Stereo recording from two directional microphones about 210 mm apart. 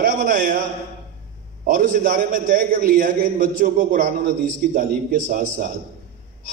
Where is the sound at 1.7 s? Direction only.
40° right (ahead or behind).